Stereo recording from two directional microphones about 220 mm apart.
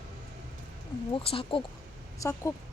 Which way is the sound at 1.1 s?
25° left (ahead or behind).